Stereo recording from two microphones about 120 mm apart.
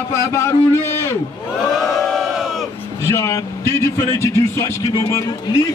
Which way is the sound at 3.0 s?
25° left (ahead or behind).